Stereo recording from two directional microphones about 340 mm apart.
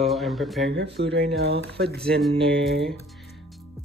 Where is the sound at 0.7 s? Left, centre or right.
Right.